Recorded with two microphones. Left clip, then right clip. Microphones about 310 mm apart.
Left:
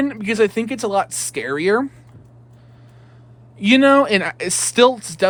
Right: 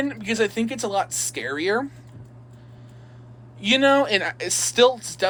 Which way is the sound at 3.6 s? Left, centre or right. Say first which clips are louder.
Left 5 dB; left.